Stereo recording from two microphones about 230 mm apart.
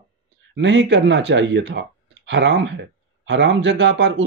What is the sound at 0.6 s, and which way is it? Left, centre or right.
Speech, right.